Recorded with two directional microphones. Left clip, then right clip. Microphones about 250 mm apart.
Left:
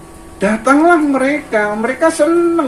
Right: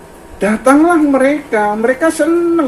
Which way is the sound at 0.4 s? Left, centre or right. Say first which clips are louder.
Right 1 dB; right.